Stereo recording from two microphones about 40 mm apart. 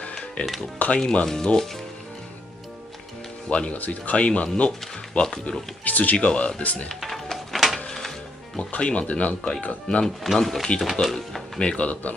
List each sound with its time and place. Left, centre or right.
0.4 s speech: left
1.2 s speech: centre
3.4 s speech: left
5.9 s speech: left
6.1 s speech: left
7.0 s music: centre
7.9 s dishes: centre
8.5 s speech: left
10.2 s speech: centre
11.1 s speech: centre
11.6 s speech: left